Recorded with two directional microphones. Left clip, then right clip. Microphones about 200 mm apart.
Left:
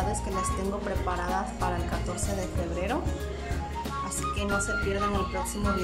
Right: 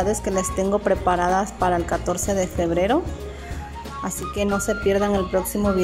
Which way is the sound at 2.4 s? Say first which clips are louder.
Right 11 dB; 25° right (ahead or behind).